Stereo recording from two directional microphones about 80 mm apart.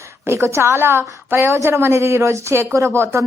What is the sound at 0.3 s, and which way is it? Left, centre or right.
A woman's voice, right.